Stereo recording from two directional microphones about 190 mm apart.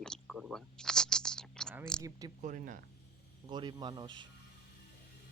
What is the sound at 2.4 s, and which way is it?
Speech, 45° right (ahead or behind).